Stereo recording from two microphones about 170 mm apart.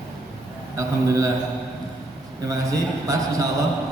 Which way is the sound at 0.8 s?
20° right (ahead or behind).